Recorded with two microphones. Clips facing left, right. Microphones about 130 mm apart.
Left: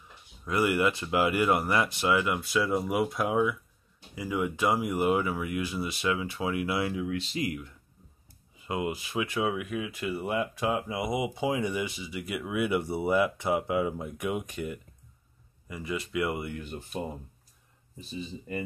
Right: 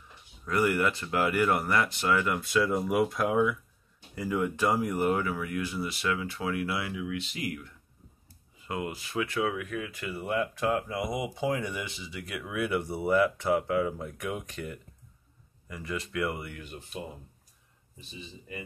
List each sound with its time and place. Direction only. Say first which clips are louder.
0.5 s speech: left 1 dB; 15° left (ahead or behind)
7.0 s speech: left 3 dB; 35° left (ahead or behind); by 16.6 s 20° left (ahead or behind)